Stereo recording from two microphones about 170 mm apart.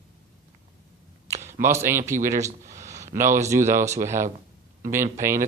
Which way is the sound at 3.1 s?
15° right (ahead or behind).